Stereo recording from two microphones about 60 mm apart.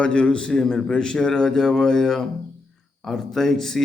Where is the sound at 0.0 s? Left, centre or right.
Centre.